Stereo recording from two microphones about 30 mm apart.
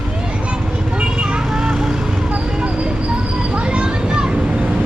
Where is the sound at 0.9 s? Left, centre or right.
Right.